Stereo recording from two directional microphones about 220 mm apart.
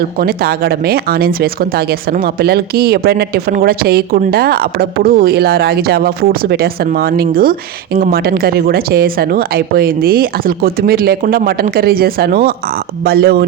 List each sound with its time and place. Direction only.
0.2 s speech: 45° right (ahead or behind)